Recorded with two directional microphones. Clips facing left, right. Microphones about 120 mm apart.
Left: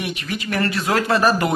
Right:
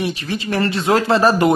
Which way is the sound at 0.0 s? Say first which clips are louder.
Right 4 dB; 30° right (ahead or behind).